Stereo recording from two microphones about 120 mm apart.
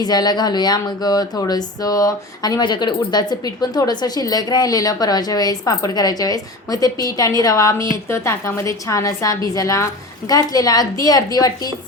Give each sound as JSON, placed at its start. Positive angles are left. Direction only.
{"t": 0.0, "sound": "a woman's voice", "side_deg": 35}